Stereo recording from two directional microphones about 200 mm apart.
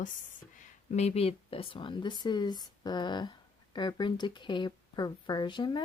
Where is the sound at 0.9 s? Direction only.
30° left (ahead or behind).